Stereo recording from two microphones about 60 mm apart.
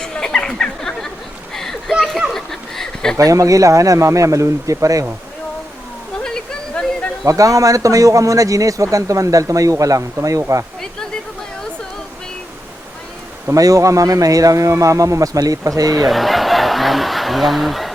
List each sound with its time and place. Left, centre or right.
0.0 s a sound: centre
3.2 s speech: right
6.2 s a sound: centre
7.3 s a man's voice: right
13.5 s a man's voice: right
16.0 s snicker: centre